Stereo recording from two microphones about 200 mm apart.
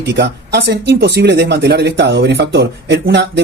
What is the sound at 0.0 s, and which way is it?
Speech, 55° right (ahead or behind).